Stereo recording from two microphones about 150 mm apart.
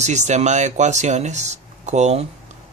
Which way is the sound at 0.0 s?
50° right (ahead or behind).